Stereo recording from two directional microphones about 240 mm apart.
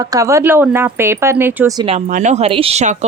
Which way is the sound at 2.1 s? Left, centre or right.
Right.